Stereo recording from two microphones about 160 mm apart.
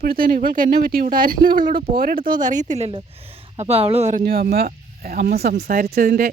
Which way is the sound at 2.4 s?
50° right (ahead or behind).